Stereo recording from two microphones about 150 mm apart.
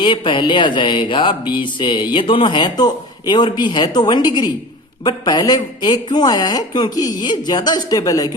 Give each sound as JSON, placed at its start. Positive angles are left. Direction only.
{"t": 0.0, "sound": "speech", "side_deg": 35}